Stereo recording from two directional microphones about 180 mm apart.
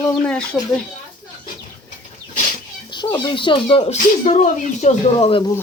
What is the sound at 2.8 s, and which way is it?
Speech, 25° left (ahead or behind).